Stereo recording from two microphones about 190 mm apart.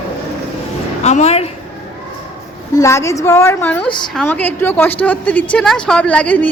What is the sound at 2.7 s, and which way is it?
A woman's voice, 15° left (ahead or behind).